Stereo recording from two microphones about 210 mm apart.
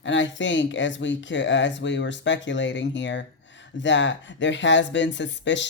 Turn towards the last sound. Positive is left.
turn(degrees=60)  # may be behind; listen again after turning